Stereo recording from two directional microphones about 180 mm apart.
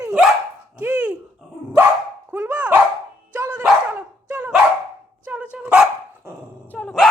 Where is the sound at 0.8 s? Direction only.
5° right (ahead or behind).